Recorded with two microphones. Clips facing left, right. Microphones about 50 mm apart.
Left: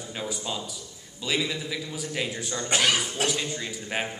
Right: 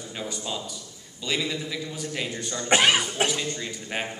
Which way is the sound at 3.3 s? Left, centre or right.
Centre.